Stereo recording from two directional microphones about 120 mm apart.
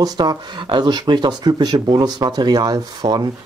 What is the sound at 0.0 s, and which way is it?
Speech, 35° right (ahead or behind).